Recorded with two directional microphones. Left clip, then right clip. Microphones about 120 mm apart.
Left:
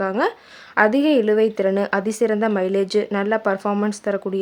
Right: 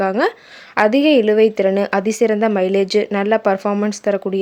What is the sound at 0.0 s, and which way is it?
Speech, 20° right (ahead or behind).